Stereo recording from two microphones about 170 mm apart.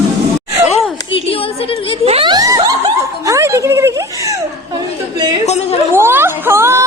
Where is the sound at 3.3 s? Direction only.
20° right (ahead or behind).